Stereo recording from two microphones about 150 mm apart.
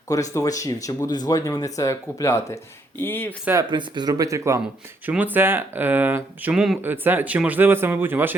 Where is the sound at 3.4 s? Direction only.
20° right (ahead or behind).